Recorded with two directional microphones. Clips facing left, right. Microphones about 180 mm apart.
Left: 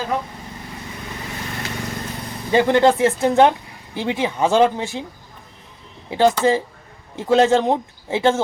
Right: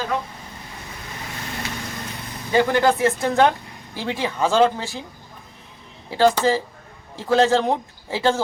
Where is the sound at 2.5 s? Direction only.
25° left (ahead or behind).